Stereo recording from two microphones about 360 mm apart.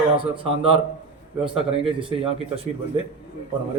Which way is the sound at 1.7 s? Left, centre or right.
Centre.